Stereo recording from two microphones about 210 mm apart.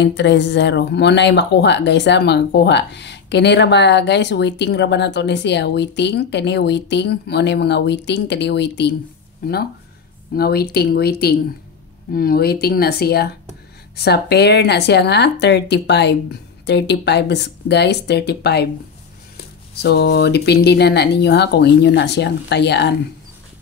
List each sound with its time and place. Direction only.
0.0 s a woman's voice: 55° left (ahead or behind)